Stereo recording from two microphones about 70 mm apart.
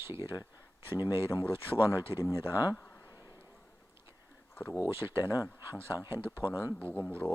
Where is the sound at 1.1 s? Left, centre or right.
Left.